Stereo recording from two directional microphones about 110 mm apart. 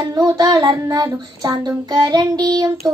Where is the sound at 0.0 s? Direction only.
35° right (ahead or behind).